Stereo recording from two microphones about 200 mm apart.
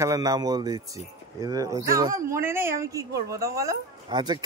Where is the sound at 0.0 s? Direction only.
15° right (ahead or behind).